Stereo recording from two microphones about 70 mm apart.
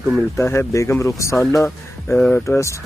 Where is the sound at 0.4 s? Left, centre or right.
Left.